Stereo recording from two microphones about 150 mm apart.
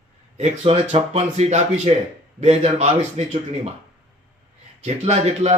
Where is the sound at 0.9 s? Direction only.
45° right (ahead or behind).